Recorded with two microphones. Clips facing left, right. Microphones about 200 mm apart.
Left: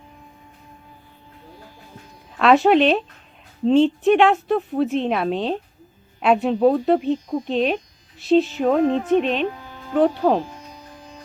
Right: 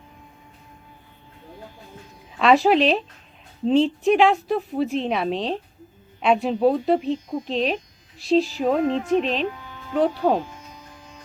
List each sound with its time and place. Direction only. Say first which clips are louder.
2.4 s a woman's voice: left 2 dB; centre (ahead or behind)
8.8 s a woman's voice: left 3 dB; 35° left (ahead or behind)
9.0 s a woman's voice: left 3 dB; centre (ahead or behind)
9.5 s music: left 2 dB; 40° left (ahead or behind)
10.2 s a woman's voice: left 2 dB; centre (ahead or behind)
10.4 s music: left 3 dB; 35° left (ahead or behind)